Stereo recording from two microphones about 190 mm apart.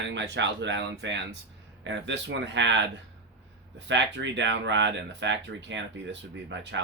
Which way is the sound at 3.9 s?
70° right (ahead or behind).